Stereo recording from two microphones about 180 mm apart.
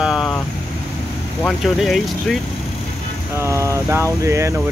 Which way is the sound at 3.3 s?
15° right (ahead or behind).